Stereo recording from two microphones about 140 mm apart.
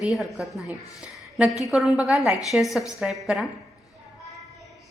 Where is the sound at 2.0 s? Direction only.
5° right (ahead or behind).